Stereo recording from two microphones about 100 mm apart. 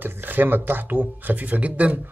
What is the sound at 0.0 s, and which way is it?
Speech, 20° right (ahead or behind).